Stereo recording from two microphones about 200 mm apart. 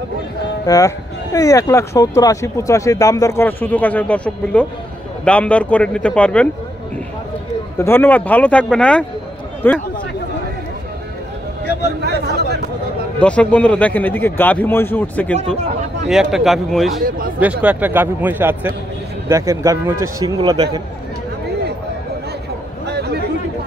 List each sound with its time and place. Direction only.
0.7 s speech: 20° left (ahead or behind)
7.7 s speech: 10° left (ahead or behind)
12.0 s speech: 55° right (ahead or behind)
13.2 s a man's voice: 5° left (ahead or behind); by 20.8 s 20° right (ahead or behind)
22.8 s a sound: 55° right (ahead or behind)